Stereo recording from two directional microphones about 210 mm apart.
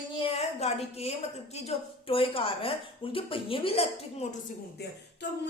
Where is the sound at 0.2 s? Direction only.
30° left (ahead or behind).